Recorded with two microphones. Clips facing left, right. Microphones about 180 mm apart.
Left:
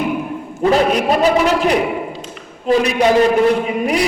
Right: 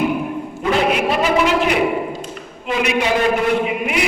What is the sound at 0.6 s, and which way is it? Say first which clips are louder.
A man's voice: left 4 dB; 40° left (ahead or behind).